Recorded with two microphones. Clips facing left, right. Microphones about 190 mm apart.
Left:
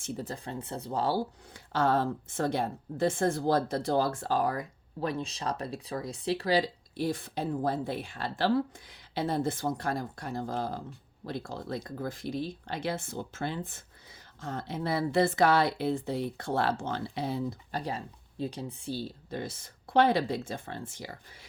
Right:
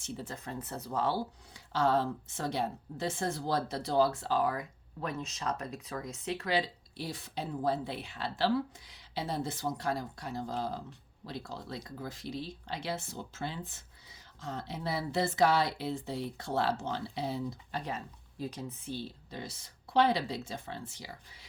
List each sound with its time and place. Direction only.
0.0 s speech: 40° left (ahead or behind)
1.5 s a woman's voice: 50° left (ahead or behind)
17.7 s speech: 35° left (ahead or behind)
19.3 s a woman's voice: 50° left (ahead or behind)